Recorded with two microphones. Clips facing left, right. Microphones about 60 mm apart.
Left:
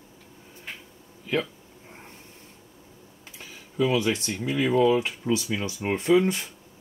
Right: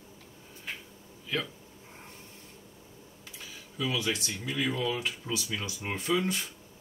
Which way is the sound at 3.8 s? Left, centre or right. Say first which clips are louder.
Left 8 dB; left.